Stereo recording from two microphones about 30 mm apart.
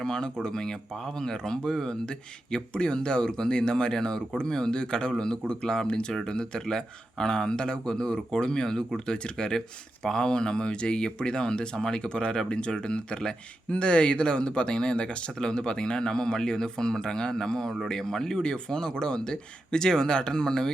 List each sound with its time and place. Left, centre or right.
0.0 s speech: left
5.9 s speech: left; by 18.4 s centre
18.4 s speech: left